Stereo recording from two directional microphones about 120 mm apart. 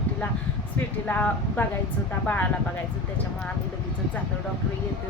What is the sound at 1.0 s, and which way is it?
Speech, 15° left (ahead or behind).